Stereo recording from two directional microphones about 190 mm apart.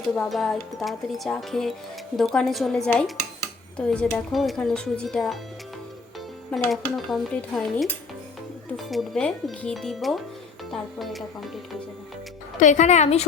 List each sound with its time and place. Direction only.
0.2 s speech: centre (ahead or behind)
6.7 s speech: centre (ahead or behind)
12.5 s speech: 40° left (ahead or behind)